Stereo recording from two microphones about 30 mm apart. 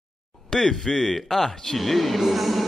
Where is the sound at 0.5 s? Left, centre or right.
Centre.